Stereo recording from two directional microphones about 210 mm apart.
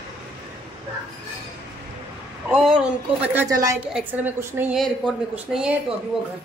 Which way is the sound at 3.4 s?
15° right (ahead or behind).